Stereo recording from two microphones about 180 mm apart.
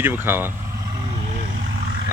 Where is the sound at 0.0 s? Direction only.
10° right (ahead or behind).